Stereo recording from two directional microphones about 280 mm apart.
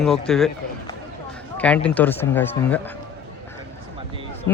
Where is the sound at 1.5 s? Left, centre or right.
Centre.